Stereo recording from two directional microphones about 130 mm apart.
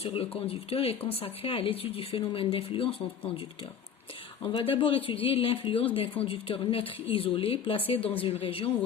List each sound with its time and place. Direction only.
0.0 s speech: 45° left (ahead or behind)
4.5 s speech: 45° left (ahead or behind)